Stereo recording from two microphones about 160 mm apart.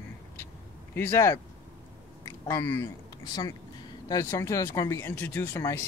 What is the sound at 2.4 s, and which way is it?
Speech, 15° left (ahead or behind).